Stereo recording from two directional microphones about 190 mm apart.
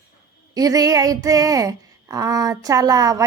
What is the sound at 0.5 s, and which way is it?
Speech, 20° right (ahead or behind).